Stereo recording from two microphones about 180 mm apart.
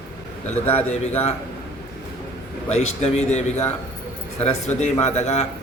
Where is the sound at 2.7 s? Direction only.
40° left (ahead or behind).